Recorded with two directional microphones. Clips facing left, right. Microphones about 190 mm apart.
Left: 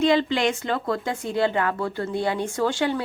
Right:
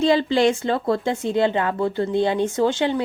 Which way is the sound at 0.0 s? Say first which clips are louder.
Right 3 dB; 30° right (ahead or behind).